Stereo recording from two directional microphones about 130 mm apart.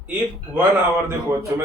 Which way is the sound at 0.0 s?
15° right (ahead or behind).